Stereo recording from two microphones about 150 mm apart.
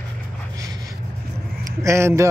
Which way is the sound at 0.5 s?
20° right (ahead or behind).